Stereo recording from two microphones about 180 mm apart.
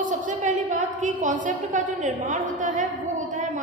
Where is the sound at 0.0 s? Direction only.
45° right (ahead or behind).